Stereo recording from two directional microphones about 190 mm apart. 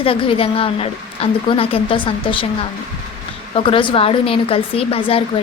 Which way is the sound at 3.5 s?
30° left (ahead or behind).